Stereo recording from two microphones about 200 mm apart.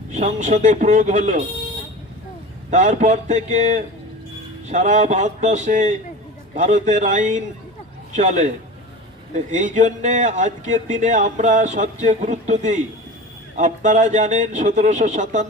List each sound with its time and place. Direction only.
0.1 s speech: 35° right (ahead or behind)
2.6 s speech: 35° right (ahead or behind)